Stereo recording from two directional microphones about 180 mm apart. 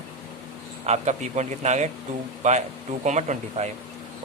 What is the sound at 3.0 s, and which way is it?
Speech, 40° right (ahead or behind).